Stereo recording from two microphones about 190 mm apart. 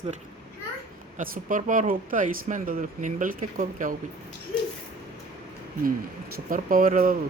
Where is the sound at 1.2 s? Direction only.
45° right (ahead or behind).